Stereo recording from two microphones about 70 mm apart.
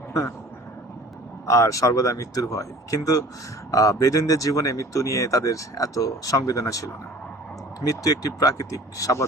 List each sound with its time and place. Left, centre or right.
1.5 s speech: left